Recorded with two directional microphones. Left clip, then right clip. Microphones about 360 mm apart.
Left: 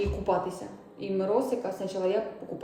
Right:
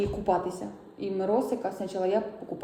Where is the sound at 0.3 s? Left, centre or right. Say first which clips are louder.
Right 1 dB; centre.